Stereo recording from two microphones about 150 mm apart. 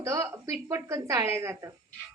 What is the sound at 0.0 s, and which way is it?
A woman's voice, 20° right (ahead or behind).